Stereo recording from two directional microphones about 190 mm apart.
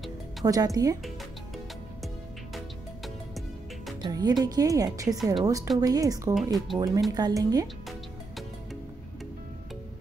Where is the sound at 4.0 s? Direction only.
20° right (ahead or behind).